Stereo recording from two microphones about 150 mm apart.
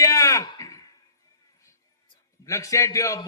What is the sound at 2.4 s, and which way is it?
Speech, 20° left (ahead or behind).